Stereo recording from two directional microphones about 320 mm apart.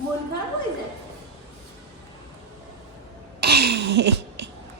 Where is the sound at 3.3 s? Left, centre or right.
Right.